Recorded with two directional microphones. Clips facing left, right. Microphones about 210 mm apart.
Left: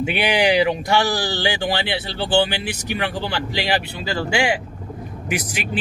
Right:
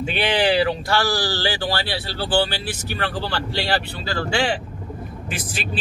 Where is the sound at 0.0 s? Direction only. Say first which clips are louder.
Left 2 dB; 15° left (ahead or behind).